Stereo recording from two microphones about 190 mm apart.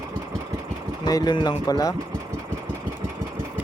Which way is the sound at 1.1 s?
20° left (ahead or behind).